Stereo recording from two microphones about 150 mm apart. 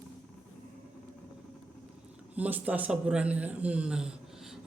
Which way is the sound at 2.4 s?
10° right (ahead or behind).